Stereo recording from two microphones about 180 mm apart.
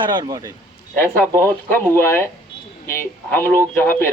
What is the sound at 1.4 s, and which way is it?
Speech, 15° left (ahead or behind).